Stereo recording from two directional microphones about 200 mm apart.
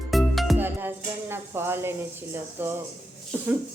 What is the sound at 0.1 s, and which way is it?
Music, centre (ahead or behind).